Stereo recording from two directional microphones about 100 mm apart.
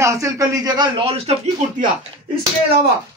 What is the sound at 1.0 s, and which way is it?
Speech, 90° right.